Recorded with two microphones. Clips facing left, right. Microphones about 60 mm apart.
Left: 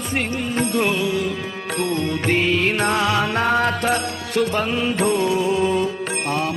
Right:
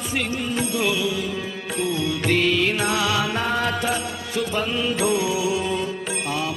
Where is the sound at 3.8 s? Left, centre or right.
Left.